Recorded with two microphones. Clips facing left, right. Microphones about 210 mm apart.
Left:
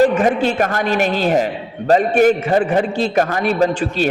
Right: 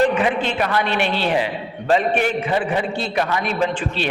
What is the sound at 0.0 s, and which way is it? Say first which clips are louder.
A man's voice: left 4 dB; 45° left (ahead or behind).